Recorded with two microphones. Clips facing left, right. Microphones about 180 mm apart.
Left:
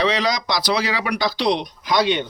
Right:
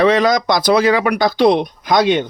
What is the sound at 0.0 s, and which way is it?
Speech, 50° right (ahead or behind).